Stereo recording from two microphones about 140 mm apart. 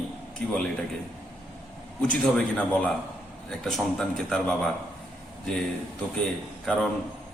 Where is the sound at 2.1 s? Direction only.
10° left (ahead or behind).